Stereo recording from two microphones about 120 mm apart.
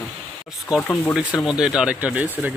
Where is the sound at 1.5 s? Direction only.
5° right (ahead or behind).